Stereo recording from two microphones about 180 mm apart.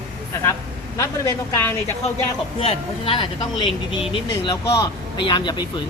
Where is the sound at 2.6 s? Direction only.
30° left (ahead or behind).